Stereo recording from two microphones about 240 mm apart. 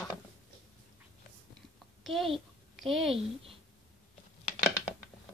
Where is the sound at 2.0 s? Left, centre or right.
Centre.